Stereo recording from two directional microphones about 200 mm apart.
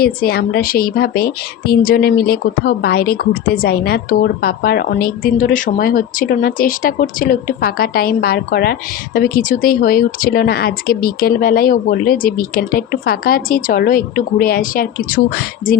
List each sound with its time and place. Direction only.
0.0 s a woman's voice: 50° left (ahead or behind)